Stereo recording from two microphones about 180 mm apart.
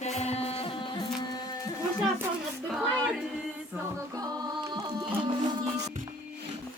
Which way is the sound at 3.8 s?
20° right (ahead or behind).